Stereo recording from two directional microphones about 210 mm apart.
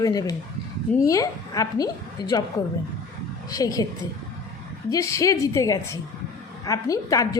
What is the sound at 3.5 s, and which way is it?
Speech, 15° left (ahead or behind).